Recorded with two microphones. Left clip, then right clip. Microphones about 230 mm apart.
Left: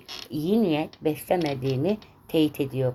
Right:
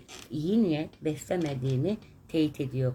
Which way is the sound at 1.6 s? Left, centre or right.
Left.